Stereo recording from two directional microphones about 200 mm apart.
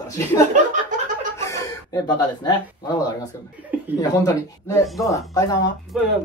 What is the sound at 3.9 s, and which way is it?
Speech, 20° left (ahead or behind).